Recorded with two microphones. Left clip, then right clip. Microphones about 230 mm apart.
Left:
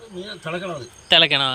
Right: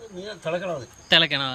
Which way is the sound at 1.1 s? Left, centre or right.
Centre.